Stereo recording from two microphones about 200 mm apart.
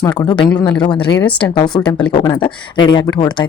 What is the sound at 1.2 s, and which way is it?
Speech, 10° left (ahead or behind).